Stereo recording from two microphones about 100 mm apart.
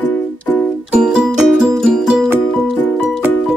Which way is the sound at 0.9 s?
10° right (ahead or behind).